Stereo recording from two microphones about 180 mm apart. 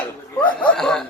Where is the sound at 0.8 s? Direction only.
5° left (ahead or behind).